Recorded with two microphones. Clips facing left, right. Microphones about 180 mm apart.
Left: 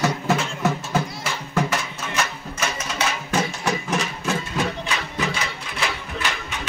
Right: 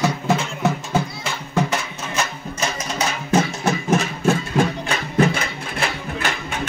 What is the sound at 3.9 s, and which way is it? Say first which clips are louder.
Music: right 6 dB; 50° right (ahead or behind).